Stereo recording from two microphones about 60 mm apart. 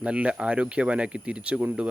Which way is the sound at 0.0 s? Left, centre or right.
Centre.